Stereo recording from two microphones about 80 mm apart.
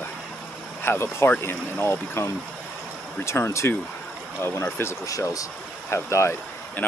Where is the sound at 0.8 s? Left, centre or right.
Left.